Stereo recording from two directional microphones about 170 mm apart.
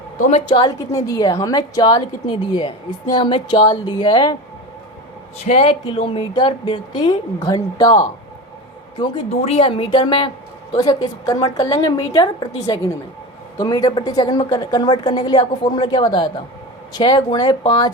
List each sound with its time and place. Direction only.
0.4 s a woman's voice: 25° left (ahead or behind)
5.5 s a woman's voice: 35° left (ahead or behind)